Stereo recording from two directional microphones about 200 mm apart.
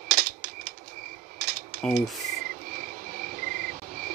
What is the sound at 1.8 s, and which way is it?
Speech, centre (ahead or behind).